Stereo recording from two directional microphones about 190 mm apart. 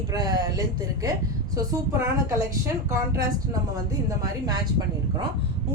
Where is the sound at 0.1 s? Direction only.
20° right (ahead or behind).